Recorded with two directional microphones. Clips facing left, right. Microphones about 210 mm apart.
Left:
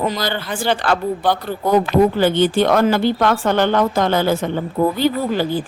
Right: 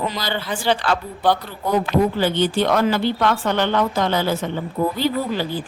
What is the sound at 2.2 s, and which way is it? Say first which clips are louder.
Speech: left 4 dB; 50° left (ahead or behind).